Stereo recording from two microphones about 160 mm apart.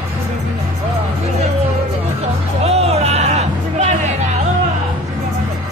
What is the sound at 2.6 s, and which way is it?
Music, 40° right (ahead or behind).